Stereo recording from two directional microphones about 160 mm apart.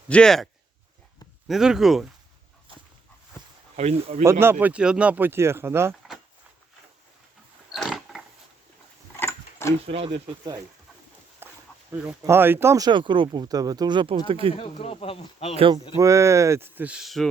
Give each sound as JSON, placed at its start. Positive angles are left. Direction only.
{"t": 0.1, "sound": "speech", "side_deg": 5}
{"t": 1.5, "sound": "speech", "side_deg": -5}
{"t": 3.8, "sound": "speech", "side_deg": -40}
{"t": 4.2, "sound": "speech", "side_deg": -15}
{"t": 7.7, "sound": "a sound", "side_deg": 0}
{"t": 9.1, "sound": "roaring cats", "side_deg": 15}
{"t": 9.8, "sound": "speech", "side_deg": -35}
{"t": 11.4, "sound": "dog", "side_deg": -15}
{"t": 11.9, "sound": "speech", "side_deg": -15}
{"t": 14.5, "sound": "speech", "side_deg": 40}
{"t": 15.5, "sound": "speech", "side_deg": -35}
{"t": 16.0, "sound": "speech", "side_deg": -20}